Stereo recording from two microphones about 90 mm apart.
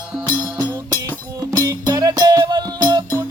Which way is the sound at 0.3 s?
45° right (ahead or behind).